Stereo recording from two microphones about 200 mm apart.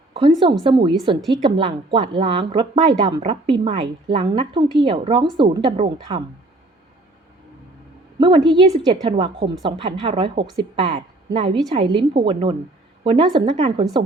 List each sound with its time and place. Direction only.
0.1 s a woman's voice: 25° right (ahead or behind)
8.2 s a woman's voice: 20° right (ahead or behind)